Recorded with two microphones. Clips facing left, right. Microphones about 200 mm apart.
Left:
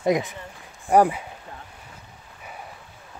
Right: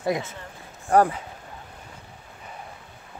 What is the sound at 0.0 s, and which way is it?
Speech, 20° left (ahead or behind).